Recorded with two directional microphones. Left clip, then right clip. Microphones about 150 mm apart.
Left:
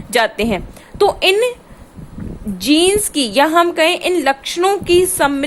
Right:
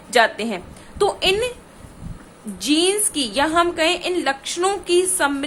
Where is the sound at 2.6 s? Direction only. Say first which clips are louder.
Left 6 dB; 45° left (ahead or behind).